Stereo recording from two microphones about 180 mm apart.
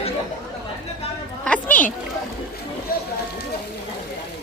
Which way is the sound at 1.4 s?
10° left (ahead or behind).